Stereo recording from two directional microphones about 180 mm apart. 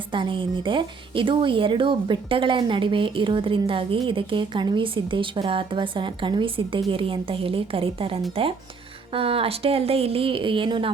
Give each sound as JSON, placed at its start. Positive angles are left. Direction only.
{"t": 0.1, "sound": "a woman's voice", "side_deg": -30}